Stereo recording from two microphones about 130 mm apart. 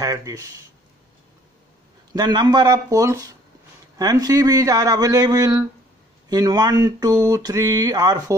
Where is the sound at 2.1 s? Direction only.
30° right (ahead or behind).